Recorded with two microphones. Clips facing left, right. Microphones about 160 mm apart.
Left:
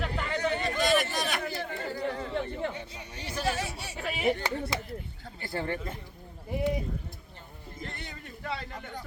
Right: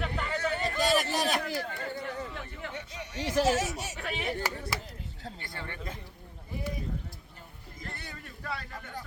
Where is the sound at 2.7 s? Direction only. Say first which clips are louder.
Right 2 dB; 85° right.